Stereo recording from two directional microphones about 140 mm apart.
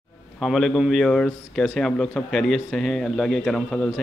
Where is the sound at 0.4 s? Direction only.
Centre (ahead or behind).